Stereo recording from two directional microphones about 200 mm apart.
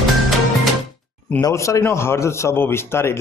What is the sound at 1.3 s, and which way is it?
A man's voice, 15° left (ahead or behind).